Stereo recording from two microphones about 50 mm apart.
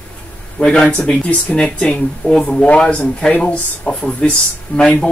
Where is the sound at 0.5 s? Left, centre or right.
Centre.